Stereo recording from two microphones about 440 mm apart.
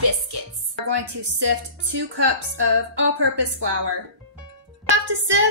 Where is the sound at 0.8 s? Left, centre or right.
Right.